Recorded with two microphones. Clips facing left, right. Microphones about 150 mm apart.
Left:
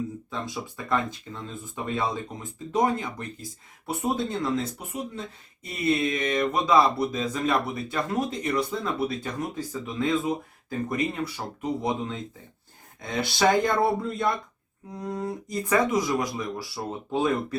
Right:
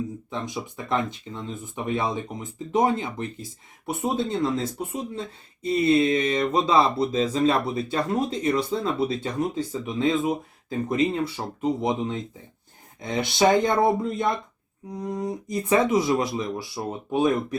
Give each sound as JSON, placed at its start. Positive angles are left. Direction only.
{"t": 0.3, "sound": "speech", "side_deg": -20}